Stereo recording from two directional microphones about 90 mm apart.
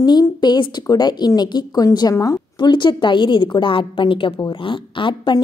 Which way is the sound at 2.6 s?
60° left (ahead or behind).